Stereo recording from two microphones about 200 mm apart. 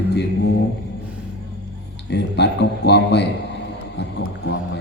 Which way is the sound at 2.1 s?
55° left (ahead or behind).